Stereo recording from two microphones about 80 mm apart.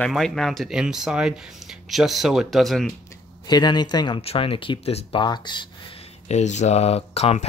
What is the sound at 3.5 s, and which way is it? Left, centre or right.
Speech, left.